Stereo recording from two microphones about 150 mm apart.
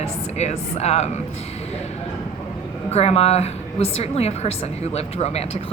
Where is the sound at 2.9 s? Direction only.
45° left (ahead or behind).